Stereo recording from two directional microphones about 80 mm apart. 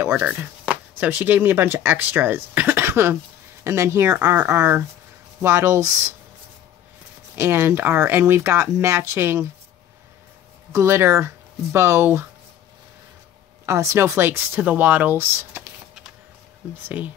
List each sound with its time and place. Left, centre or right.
0.1 s speech: centre; by 6.1 s right
7.3 s speech: right
10.7 s speech: right
13.7 s speech: right
16.8 s speech: centre